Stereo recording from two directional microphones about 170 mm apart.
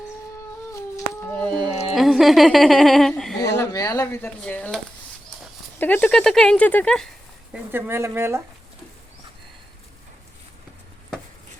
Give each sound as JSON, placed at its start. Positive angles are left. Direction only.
{"t": 0.7, "sound": "humming", "side_deg": 20}
{"t": 1.5, "sound": "a sound", "side_deg": -25}
{"t": 2.0, "sound": "speech", "side_deg": 0}
{"t": 3.4, "sound": "speech", "side_deg": 20}
{"t": 5.8, "sound": "speech", "side_deg": 10}
{"t": 7.5, "sound": "speech", "side_deg": -10}